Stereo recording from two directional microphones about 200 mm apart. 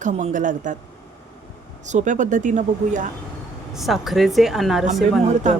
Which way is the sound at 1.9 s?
40° right (ahead or behind).